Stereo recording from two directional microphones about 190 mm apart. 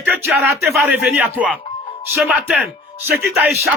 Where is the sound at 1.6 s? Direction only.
25° left (ahead or behind).